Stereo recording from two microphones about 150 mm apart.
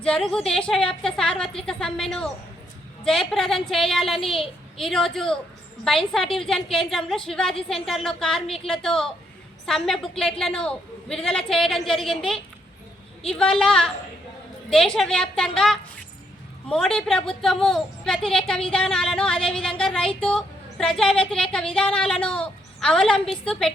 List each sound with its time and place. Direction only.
0.0 s a woman's voice: 5° left (ahead or behind)
21.6 s a woman's voice: 40° left (ahead or behind)
22.0 s a woman's voice: centre (ahead or behind)